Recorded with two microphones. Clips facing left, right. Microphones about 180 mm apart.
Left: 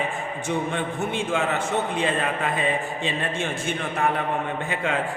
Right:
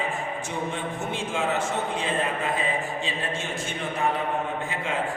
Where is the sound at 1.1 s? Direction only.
60° left (ahead or behind).